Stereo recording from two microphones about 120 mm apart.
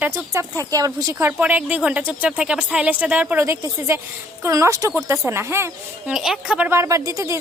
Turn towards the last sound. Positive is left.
turn(degrees=-30)  # may be behind; listen again after turning